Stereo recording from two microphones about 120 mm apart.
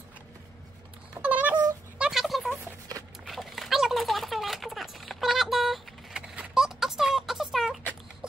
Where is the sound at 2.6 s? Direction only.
25° right (ahead or behind).